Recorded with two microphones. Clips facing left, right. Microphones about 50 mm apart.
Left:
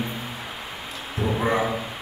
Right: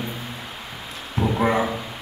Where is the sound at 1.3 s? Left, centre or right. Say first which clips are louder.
Right 2 dB; centre.